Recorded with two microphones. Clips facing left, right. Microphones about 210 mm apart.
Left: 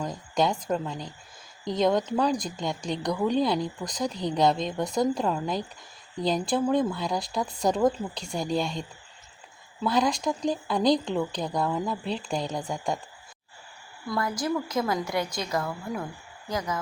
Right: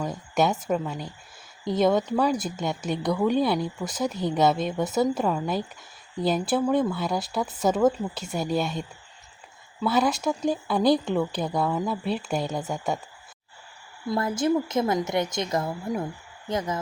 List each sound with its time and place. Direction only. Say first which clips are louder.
0.0 s speech: right 2 dB; 5° right (ahead or behind)
14.1 s a woman's voice: right 4 dB; 25° right (ahead or behind)